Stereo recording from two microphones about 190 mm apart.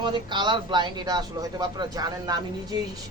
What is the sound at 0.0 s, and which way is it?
Speech, 25° right (ahead or behind).